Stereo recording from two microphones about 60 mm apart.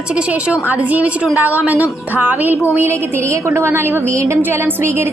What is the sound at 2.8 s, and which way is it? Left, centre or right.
A woman's voice, right.